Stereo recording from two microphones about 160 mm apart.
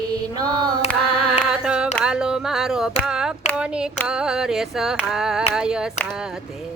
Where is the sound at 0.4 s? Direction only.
25° right (ahead or behind).